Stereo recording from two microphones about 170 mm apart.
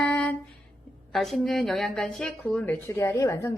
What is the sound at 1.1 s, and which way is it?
Speech, centre (ahead or behind).